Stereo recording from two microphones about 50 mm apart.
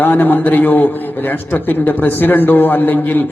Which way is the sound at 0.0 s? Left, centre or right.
Left.